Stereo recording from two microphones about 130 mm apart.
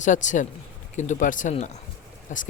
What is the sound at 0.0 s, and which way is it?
Speech, 70° left (ahead or behind).